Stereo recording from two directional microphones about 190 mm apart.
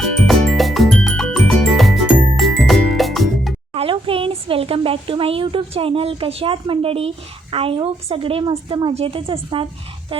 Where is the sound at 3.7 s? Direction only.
30° right (ahead or behind).